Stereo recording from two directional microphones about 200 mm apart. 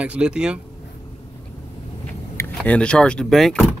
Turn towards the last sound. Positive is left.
turn(degrees=0)  # may be behind; listen again after turning